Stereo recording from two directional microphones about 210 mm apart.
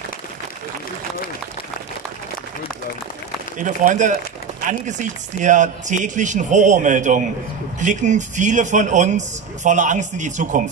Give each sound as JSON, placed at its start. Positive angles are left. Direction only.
{"t": 3.5, "sound": "speech", "side_deg": -35}